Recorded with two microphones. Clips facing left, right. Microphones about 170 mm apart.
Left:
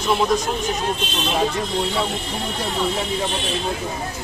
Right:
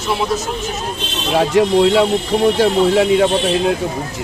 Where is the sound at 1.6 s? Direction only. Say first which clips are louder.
Right 11 dB; 90° right.